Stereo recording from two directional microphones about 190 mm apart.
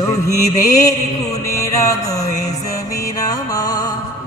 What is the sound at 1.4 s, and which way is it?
Music, 15° left (ahead or behind).